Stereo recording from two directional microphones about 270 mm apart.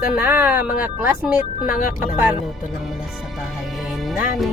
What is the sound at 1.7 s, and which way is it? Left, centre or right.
Speech, left.